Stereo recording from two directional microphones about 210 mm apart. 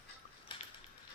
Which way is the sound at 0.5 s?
20° left (ahead or behind).